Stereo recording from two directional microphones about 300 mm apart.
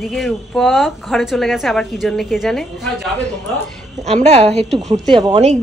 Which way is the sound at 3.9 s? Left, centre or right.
Right.